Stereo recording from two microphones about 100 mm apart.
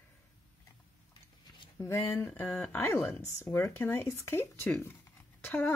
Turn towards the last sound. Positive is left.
turn(degrees=20)  # may be behind; listen again after turning